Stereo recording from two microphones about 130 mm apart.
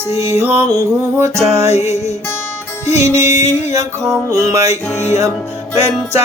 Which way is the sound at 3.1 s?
25° right (ahead or behind).